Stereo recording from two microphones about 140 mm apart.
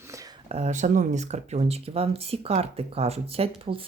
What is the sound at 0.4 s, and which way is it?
Speech, 50° right (ahead or behind).